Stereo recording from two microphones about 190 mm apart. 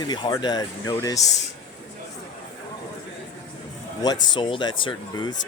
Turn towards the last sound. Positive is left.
turn(degrees=20)  # may be behind; listen again after turning